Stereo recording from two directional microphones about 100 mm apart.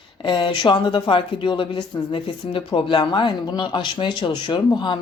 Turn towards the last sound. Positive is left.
turn(degrees=45)  # may be behind; listen again after turning